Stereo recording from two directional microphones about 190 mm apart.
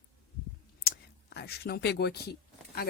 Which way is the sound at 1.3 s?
55° left (ahead or behind).